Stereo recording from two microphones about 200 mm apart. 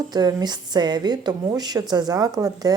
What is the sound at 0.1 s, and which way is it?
A woman's voice, 20° right (ahead or behind).